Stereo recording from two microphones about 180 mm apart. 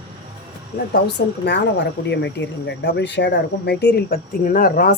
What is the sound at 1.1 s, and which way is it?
Speech, 70° left (ahead or behind).